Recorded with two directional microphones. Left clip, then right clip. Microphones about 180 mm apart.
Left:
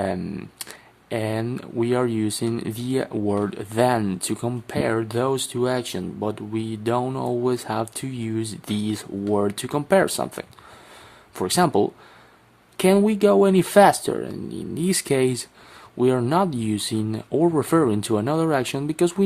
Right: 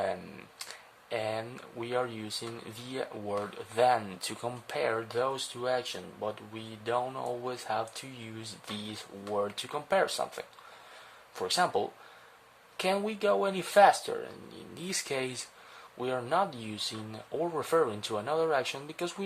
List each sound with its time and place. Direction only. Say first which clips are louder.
0.0 s speech: left 7 dB; 25° left (ahead or behind)